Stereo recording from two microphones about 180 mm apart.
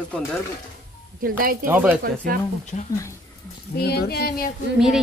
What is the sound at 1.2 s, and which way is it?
Speech, 55° right (ahead or behind).